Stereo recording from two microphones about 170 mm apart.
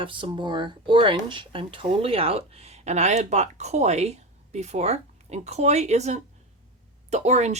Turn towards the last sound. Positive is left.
turn(degrees=-40)  # may be behind; listen again after turning